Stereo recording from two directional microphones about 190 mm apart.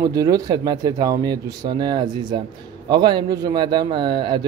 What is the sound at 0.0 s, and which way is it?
Speech, 20° right (ahead or behind).